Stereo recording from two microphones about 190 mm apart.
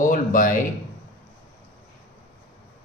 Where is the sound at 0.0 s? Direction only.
45° left (ahead or behind).